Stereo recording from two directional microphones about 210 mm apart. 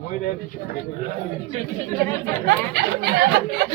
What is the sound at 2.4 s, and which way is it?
Speech, 55° right (ahead or behind).